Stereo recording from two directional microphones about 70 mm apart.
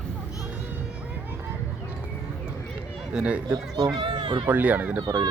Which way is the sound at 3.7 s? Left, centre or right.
Right.